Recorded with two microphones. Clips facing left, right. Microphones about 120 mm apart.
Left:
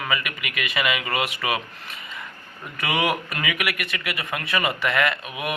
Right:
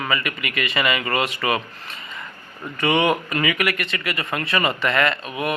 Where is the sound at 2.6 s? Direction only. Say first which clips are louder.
Right 6 dB; 30° right (ahead or behind).